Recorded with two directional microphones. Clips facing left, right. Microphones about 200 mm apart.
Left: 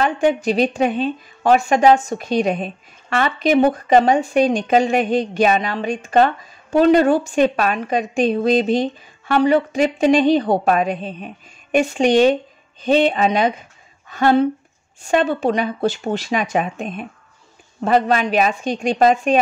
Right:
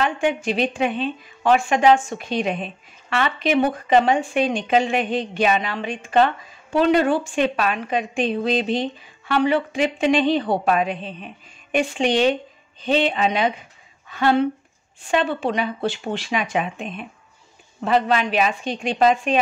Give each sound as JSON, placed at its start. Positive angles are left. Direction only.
{"t": 0.0, "sound": "a woman's voice", "side_deg": 40}